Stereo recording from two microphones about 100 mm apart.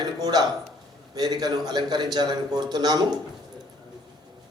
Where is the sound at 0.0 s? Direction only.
40° right (ahead or behind).